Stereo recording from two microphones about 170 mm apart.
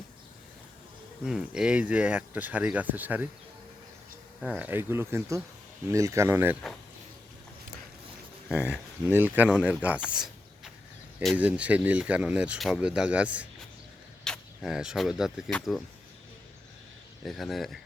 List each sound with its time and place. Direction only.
1.2 s speech: 5° right (ahead or behind)
4.4 s speech: 5° right (ahead or behind)
8.4 s speech: 15° left (ahead or behind)
8.7 s speech: 10° right (ahead or behind)
10.1 s a sound: 5° right (ahead or behind)
11.3 s speech: 10° right (ahead or behind)
17.2 s speech: centre (ahead or behind)